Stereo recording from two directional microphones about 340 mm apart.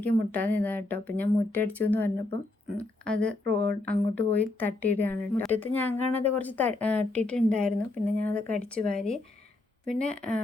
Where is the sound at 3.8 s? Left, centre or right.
Centre.